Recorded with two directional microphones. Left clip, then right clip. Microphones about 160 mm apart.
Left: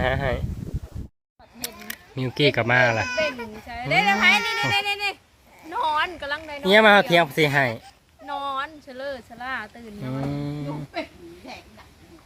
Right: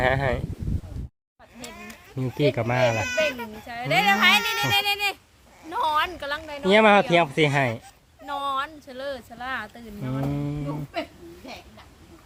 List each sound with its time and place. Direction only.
0.0 s speech: 25° right (ahead or behind)
1.6 s speech: centre (ahead or behind)